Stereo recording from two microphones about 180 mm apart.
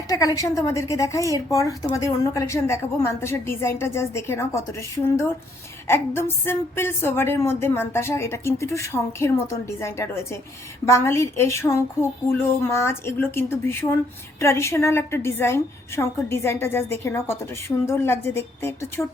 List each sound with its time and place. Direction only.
0.1 s speech: 20° left (ahead or behind)